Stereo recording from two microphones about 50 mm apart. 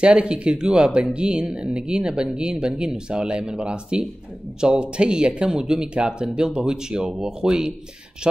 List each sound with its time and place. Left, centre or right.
0.0 s speech: right